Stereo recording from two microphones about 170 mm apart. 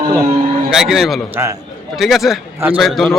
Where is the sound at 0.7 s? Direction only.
Centre (ahead or behind).